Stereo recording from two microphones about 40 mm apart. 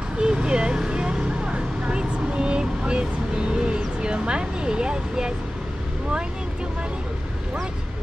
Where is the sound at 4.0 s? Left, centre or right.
Right.